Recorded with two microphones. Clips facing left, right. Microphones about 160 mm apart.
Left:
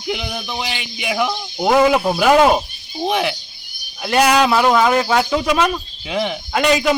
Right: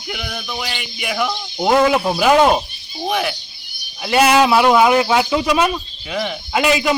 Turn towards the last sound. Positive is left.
turn(degrees=-5)  # may be behind; listen again after turning